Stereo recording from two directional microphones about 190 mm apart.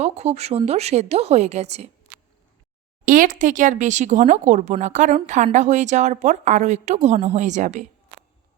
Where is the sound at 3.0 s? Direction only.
45° right (ahead or behind).